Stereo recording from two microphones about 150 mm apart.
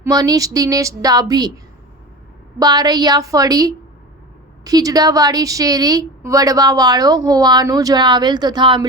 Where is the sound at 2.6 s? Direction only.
25° right (ahead or behind).